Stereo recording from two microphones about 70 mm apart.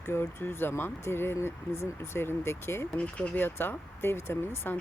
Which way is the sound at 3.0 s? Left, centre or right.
Centre.